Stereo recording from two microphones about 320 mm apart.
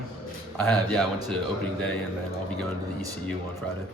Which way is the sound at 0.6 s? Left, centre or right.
Centre.